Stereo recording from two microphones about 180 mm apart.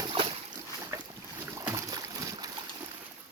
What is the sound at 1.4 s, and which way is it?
Boat, 15° right (ahead or behind).